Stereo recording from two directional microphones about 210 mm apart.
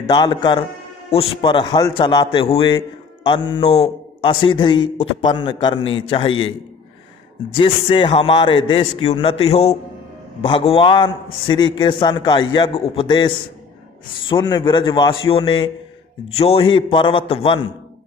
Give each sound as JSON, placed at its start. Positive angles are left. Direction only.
{"t": 0.1, "sound": "a man's voice", "side_deg": 20}
{"t": 7.5, "sound": "a man's voice", "side_deg": 25}
{"t": 14.3, "sound": "a man's voice", "side_deg": 20}